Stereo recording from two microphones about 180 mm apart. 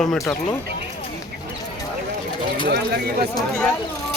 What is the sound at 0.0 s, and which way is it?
Speech, 5° left (ahead or behind).